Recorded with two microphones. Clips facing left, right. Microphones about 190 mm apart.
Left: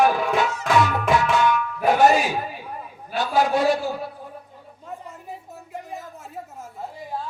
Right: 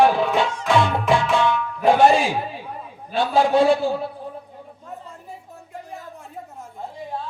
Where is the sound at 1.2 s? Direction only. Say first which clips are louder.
Even; 25° right (ahead or behind).